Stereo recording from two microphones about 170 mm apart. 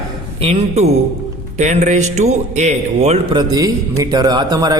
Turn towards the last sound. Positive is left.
turn(degrees=-25)  # may be behind; listen again after turning